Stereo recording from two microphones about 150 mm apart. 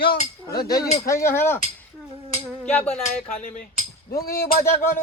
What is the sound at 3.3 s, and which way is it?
Speech, 55° left (ahead or behind).